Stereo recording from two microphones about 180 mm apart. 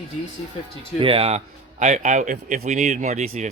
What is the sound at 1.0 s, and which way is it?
A man's voice, 30° right (ahead or behind).